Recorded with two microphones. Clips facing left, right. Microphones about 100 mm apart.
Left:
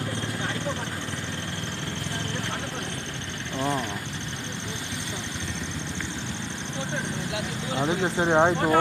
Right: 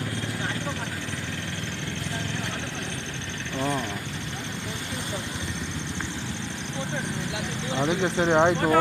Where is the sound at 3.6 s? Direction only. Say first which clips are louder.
Even; 15° left (ahead or behind).